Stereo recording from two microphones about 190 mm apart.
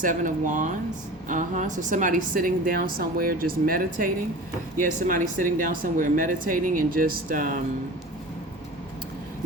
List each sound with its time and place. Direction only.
0.0 s a woman's voice: 45° right (ahead or behind)